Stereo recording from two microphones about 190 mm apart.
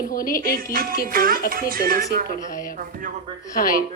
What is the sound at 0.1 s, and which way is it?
Speech, 50° left (ahead or behind).